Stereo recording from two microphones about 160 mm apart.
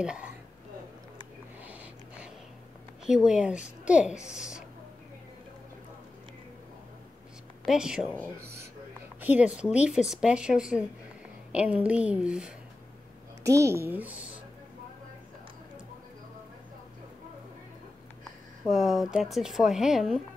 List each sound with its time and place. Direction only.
0.0 s speech: 5° right (ahead or behind)
1.6 s a sound: 10° right (ahead or behind)
3.1 s a child's voice: 5° right (ahead or behind)
7.6 s speech: 5° right (ahead or behind)
9.2 s speech: 10° right (ahead or behind)
13.4 s a child's voice: 20° right (ahead or behind)
18.7 s speech: centre (ahead or behind)